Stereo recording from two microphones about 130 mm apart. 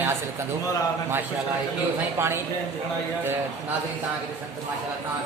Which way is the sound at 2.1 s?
20° right (ahead or behind).